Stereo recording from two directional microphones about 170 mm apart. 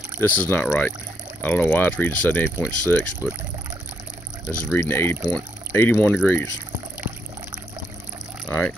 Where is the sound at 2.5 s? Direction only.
5° right (ahead or behind).